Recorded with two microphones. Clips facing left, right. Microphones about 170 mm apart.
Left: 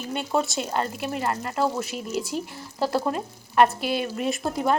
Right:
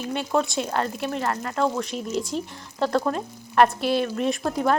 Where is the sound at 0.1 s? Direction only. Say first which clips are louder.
Right 1 dB; 5° left (ahead or behind).